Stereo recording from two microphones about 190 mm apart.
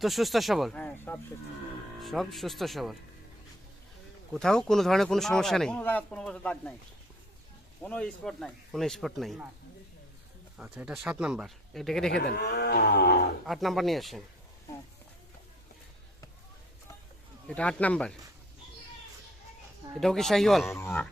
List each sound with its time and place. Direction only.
0.0 s speech: centre (ahead or behind)
4.4 s speech: 5° left (ahead or behind)
7.8 s speech: 5° left (ahead or behind)
10.6 s speech: 5° right (ahead or behind)
12.1 s speech: 55° left (ahead or behind)
13.4 s speech: centre (ahead or behind)
17.5 s speech: 5° left (ahead or behind)
20.0 s speech: centre (ahead or behind)